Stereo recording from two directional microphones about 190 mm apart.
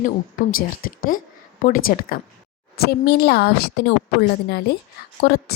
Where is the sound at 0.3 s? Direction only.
45° left (ahead or behind).